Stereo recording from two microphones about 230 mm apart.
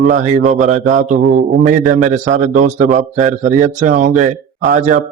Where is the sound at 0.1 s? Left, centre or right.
Right.